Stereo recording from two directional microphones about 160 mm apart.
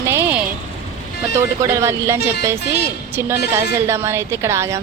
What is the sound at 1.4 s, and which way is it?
A woman's voice, 15° right (ahead or behind).